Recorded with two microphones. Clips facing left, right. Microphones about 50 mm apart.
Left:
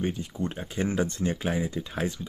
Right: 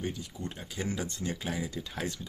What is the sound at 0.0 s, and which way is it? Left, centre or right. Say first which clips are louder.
Speech: left 7 dB; left.